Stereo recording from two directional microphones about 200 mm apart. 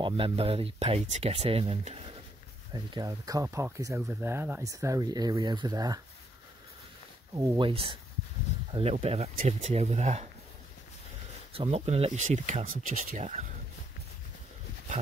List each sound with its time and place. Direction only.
0.0 s speech: 25° right (ahead or behind)
2.7 s speech: 20° right (ahead or behind)
7.3 s speech: 25° right (ahead or behind)
11.5 s speech: 30° right (ahead or behind)